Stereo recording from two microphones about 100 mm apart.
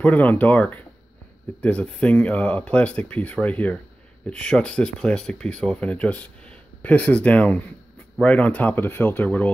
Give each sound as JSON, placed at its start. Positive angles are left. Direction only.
{"t": 0.0, "sound": "speech", "side_deg": 15}